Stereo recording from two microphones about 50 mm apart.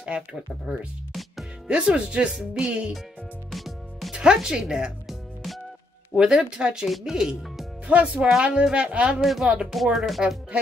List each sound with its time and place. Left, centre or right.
0.0 s speech: right
1.7 s speech: right
3.5 s music: centre
4.1 s speech: centre
6.1 s speech: centre
6.9 s speech: centre
7.8 s speech: right
9.1 s speech: centre